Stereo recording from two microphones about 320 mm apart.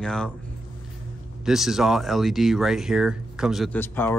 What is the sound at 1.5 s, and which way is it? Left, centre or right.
Speech, centre.